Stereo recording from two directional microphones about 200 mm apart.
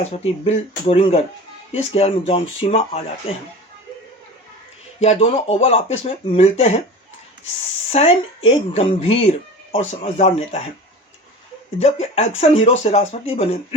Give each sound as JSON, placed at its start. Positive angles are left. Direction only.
{"t": 0.0, "sound": "speech", "side_deg": 30}
{"t": 5.0, "sound": "speech", "side_deg": 30}
{"t": 7.9, "sound": "speech", "side_deg": 30}
{"t": 11.8, "sound": "speech", "side_deg": 30}